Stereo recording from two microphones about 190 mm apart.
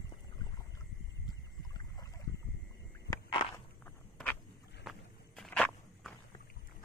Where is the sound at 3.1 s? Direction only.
20° left (ahead or behind).